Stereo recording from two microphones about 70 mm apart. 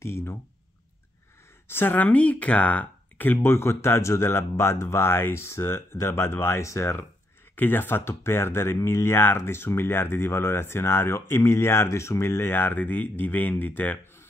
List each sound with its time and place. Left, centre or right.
0.0 s speech: left
1.7 s speech: left
7.5 s speech: left